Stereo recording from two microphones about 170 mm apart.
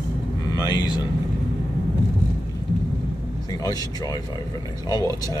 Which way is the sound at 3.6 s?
20° left (ahead or behind).